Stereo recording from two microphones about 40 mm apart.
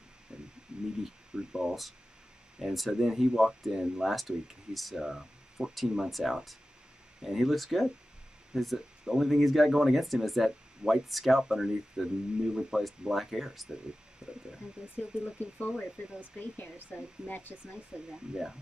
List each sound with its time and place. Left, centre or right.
0.3 s a sound: right
1.0 s speech: centre
2.6 s speech: centre
2.9 s speech: centre
4.1 s speech: centre
4.9 s speech: centre
6.0 s speech: centre
14.2 s speech: centre
15.0 s speech: left
18.3 s speech: centre